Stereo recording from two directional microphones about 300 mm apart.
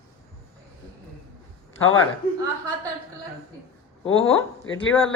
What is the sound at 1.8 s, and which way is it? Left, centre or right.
Speech, left.